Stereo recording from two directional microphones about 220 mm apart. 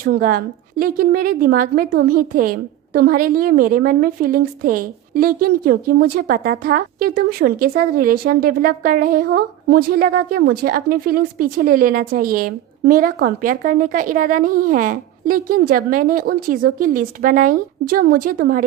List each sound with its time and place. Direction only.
0.0 s a woman's voice: 40° right (ahead or behind)